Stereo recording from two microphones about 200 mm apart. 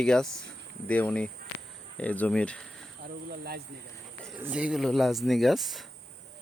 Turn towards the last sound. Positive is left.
turn(degrees=0)  # may be behind; listen again after turning